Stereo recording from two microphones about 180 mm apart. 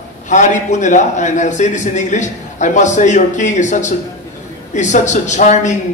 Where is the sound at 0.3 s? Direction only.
45° left (ahead or behind).